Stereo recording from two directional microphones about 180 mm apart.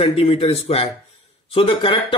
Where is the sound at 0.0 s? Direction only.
35° left (ahead or behind).